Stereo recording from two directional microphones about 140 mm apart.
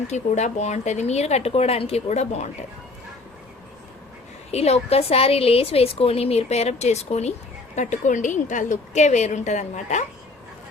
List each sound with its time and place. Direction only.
0.1 s a woman's voice: 55° left (ahead or behind)
4.5 s a woman's voice: 50° left (ahead or behind)
7.8 s a woman's voice: 60° left (ahead or behind)